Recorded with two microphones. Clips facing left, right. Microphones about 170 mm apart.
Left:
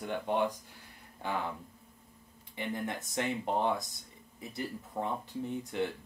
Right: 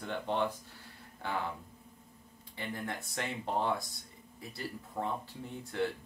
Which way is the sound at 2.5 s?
20° left (ahead or behind).